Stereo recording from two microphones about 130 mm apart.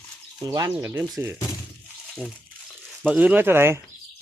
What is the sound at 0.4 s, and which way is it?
Speech, 30° right (ahead or behind).